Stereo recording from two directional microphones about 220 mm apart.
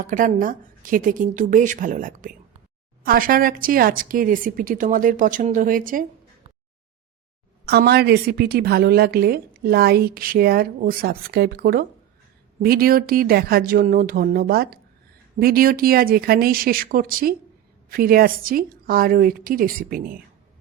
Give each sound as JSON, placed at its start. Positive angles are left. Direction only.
{"t": 0.1, "sound": "speech", "side_deg": -35}
{"t": 7.6, "sound": "a woman's voice", "side_deg": -45}